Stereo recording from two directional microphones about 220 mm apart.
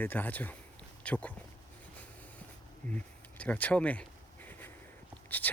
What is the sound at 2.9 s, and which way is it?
Speech, 5° left (ahead or behind).